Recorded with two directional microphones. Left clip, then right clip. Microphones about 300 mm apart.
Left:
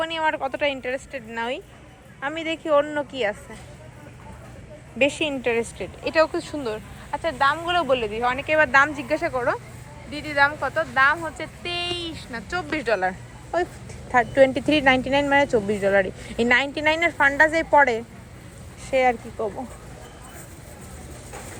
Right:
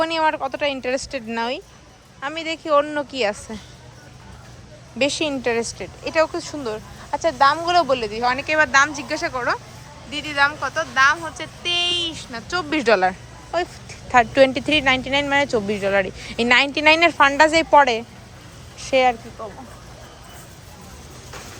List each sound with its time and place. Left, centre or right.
0.0 s speech: centre
4.9 s speech: centre
5.6 s speech: right
6.1 s speech: centre